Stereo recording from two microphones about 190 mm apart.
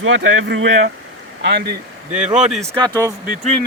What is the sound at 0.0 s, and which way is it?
Speech, 90° right.